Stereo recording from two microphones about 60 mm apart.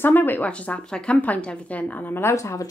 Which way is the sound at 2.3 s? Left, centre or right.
Left.